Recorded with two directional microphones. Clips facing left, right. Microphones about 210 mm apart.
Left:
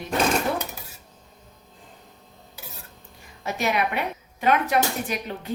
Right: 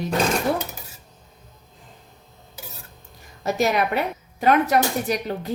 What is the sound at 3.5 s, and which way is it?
A woman's voice, 40° right (ahead or behind).